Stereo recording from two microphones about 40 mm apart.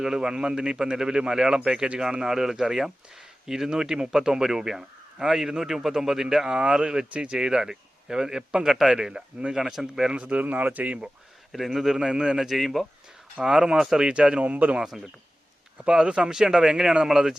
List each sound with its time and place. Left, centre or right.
0.0 s speech: centre
9.0 s speech: centre
10.1 s a man's voice: right
10.4 s speech: right
11.5 s speech: centre
11.9 s a man's voice: centre
12.4 s speech: centre
13.4 s speech: centre
14.1 s speech: right
15.8 s speech: right